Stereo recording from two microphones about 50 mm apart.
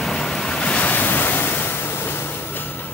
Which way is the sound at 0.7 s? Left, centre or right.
Left.